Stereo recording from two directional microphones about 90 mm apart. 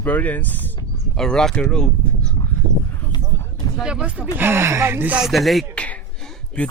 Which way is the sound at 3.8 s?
10° right (ahead or behind).